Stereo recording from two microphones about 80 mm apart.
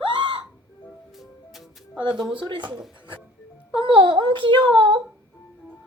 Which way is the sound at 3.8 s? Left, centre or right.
Right.